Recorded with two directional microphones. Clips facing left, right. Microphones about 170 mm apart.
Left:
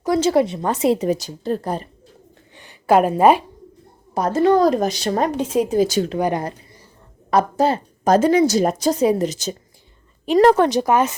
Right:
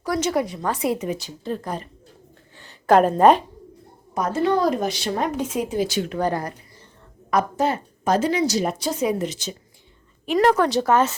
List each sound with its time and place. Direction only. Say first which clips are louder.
0.0 s speech: left 6 dB; 25° left (ahead or behind)
2.6 s a woman's voice: left 1 dB; 10° left (ahead or behind)
4.1 s a woman's voice: left 5 dB; 35° left (ahead or behind)
6.1 s speech: left 1 dB; 10° left (ahead or behind)
7.3 s a woman's voice: left 4 dB; 30° left (ahead or behind); by 11.1 s 15° left (ahead or behind)